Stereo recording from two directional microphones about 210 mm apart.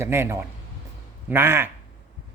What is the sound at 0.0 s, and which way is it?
A woman's voice, 10° right (ahead or behind).